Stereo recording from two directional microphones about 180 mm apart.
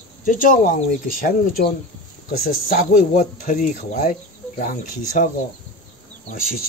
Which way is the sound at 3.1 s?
45° left (ahead or behind).